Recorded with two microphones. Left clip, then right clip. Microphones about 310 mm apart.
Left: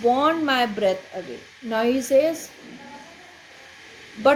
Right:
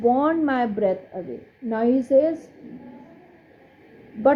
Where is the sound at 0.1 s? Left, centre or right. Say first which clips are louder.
Left 1 dB; centre.